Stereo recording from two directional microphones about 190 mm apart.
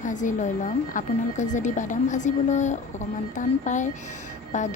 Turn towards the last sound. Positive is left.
turn(degrees=40)  # may be behind; listen again after turning